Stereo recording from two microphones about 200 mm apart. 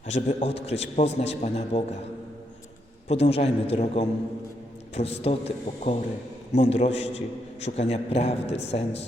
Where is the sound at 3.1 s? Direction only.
30° left (ahead or behind).